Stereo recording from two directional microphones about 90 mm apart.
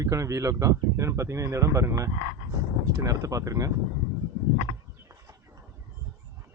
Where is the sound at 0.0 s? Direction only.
35° right (ahead or behind).